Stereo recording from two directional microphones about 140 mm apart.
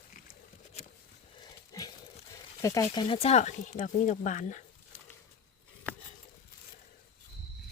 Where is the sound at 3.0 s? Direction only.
45° left (ahead or behind); by 4.6 s 65° left (ahead or behind).